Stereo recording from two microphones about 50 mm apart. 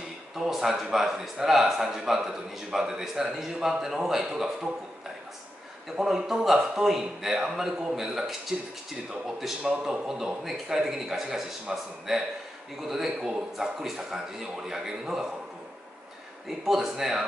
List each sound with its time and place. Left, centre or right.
0.4 s a man's voice: centre
3.8 s a man's voice: centre
5.9 s a man's voice: centre
9.8 s a man's voice: centre
16.4 s a man's voice: centre